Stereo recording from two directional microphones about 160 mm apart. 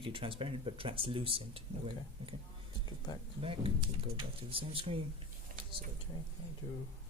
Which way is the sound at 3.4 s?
35° right (ahead or behind).